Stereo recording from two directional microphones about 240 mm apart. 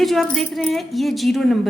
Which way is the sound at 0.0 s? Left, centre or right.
Centre.